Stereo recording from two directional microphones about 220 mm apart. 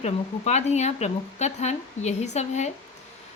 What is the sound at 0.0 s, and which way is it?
A woman's voice, 30° left (ahead or behind).